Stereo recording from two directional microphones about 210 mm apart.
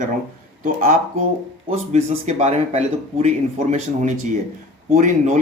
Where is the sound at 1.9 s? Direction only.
30° right (ahead or behind).